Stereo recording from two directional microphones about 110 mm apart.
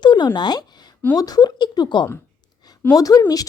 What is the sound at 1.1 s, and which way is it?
Speech, 35° left (ahead or behind).